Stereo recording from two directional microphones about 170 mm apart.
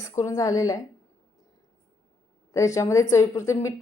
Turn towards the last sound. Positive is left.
turn(degrees=15)  # may be behind; listen again after turning